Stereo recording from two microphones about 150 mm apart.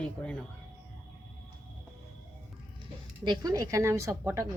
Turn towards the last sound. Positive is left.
turn(degrees=-20)  # may be behind; listen again after turning